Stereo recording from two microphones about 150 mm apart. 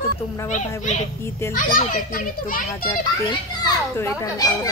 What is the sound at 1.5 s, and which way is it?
A child's voice, 70° left (ahead or behind).